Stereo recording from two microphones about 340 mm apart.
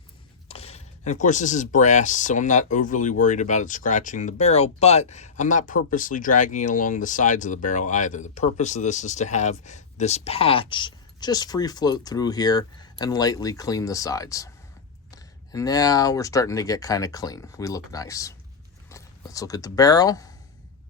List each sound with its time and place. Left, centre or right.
0.4 s speech: centre